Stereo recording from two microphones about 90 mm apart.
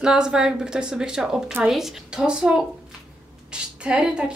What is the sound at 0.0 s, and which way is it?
A woman's voice, 10° right (ahead or behind).